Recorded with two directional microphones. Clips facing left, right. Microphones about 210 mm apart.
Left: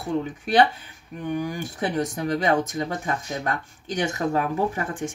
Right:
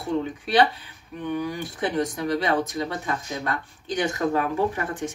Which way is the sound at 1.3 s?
45° left (ahead or behind).